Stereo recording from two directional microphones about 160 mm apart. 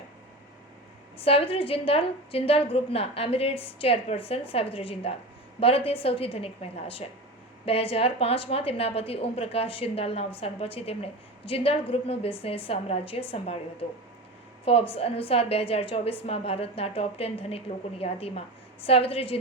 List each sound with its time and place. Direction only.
1.2 s a woman's voice: 35° left (ahead or behind)
14.6 s a woman's voice: 35° left (ahead or behind)